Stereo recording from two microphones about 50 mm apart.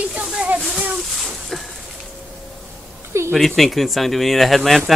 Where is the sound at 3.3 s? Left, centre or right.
Centre.